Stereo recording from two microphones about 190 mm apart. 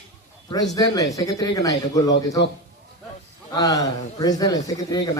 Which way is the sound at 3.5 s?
20° left (ahead or behind).